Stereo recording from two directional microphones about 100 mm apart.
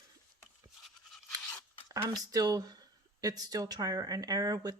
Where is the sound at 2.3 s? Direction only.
40° right (ahead or behind).